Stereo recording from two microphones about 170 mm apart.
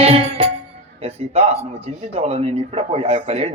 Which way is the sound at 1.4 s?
35° right (ahead or behind).